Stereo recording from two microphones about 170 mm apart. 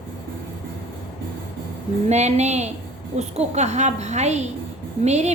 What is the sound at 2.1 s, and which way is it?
A woman's voice, 40° right (ahead or behind).